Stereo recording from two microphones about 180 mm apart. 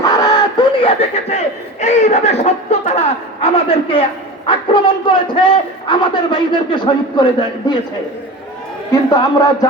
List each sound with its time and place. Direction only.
0.0 s a sound: 20° left (ahead or behind)
1.8 s a man's voice: 40° left (ahead or behind)
8.9 s a man's voice: 20° left (ahead or behind)